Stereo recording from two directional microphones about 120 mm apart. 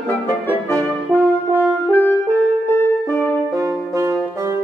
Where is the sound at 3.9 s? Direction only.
20° right (ahead or behind).